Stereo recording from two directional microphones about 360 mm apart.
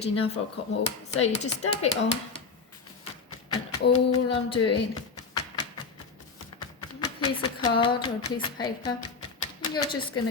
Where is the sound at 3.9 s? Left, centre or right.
Centre.